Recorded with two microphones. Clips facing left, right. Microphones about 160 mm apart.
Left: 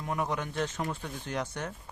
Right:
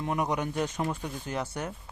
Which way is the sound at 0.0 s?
20° right (ahead or behind).